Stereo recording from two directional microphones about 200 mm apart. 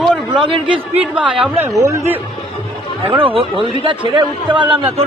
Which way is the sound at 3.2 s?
25° right (ahead or behind).